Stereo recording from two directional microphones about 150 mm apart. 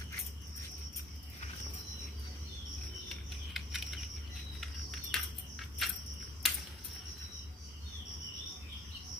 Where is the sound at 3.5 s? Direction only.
Centre (ahead or behind).